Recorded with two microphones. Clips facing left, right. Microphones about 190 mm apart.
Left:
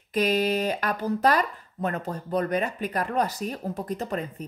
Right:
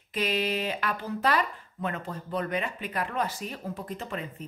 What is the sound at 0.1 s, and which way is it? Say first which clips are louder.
Mantra: left 5 dB; 45° left (ahead or behind).